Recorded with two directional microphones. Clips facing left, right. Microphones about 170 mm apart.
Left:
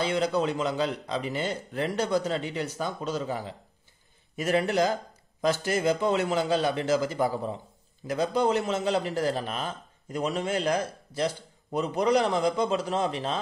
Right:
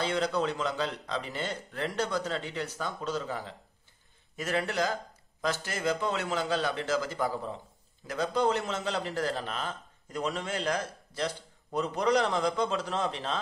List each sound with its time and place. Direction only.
0.0 s a man's voice: 10° left (ahead or behind)